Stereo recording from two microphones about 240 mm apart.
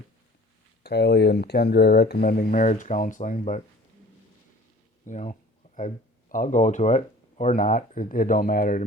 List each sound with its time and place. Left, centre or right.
0.8 s speech: left
5.0 s speech: left